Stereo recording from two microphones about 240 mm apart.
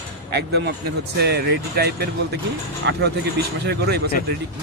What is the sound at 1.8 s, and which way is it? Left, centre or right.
Speech, right.